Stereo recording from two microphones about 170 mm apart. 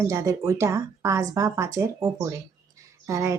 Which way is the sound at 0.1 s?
15° right (ahead or behind).